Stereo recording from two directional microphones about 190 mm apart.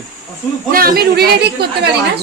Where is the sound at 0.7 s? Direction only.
50° right (ahead or behind).